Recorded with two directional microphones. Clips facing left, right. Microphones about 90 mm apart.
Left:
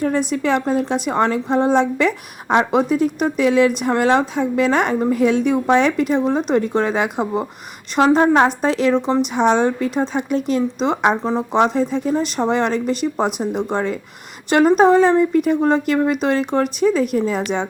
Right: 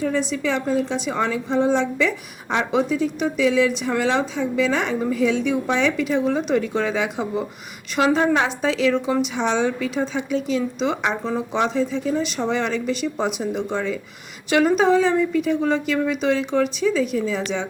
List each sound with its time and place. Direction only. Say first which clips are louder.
0.0 s a woman's voice: left 3 dB; 50° left (ahead or behind)
7.9 s a woman's voice: left 5 dB; 40° left (ahead or behind)
8.9 s speech: left 4 dB; 35° left (ahead or behind)
9.2 s a woman's voice: left 5 dB; 45° left (ahead or behind)